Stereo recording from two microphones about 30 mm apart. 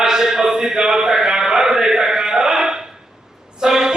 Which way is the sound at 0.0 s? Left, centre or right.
Centre.